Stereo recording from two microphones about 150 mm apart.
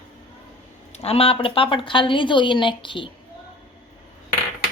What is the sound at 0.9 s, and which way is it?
Speech, 40° left (ahead or behind).